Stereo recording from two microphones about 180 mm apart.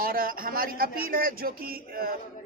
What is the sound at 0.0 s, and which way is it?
A man's voice, 55° right (ahead or behind).